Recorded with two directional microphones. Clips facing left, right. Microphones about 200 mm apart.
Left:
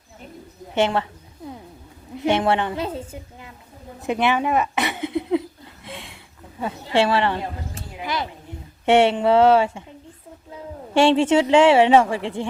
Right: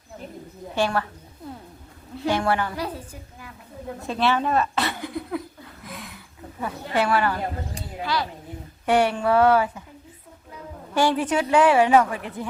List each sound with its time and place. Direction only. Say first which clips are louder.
0.7 s a woman's voice: left 3 dB; 20° left (ahead or behind)
2.1 s a woman's voice: left 3 dB; 20° left (ahead or behind)
5.8 s a sound: left 2 dB; 25° left (ahead or behind)
6.6 s a woman's voice: left 4 dB; 25° left (ahead or behind)
10.9 s a woman's voice: left 6 dB; 25° left (ahead or behind)